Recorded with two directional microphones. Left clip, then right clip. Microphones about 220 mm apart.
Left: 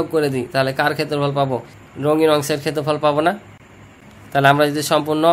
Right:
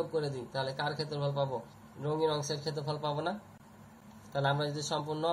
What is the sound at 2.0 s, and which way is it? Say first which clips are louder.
Speech: left 16 dB; 90° left.